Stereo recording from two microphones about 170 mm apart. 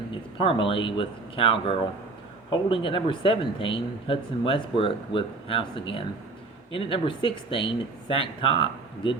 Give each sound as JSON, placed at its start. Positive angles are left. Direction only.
{"t": 0.1, "sound": "speech", "side_deg": 30}